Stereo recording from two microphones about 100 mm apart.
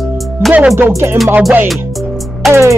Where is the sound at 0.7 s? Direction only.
25° right (ahead or behind).